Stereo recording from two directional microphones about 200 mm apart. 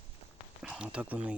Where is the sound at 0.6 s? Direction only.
5° right (ahead or behind).